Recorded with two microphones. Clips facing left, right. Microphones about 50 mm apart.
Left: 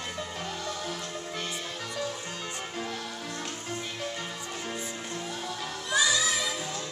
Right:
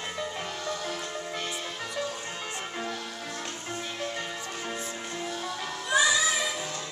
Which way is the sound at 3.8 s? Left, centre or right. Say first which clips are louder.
Right 1 dB; centre.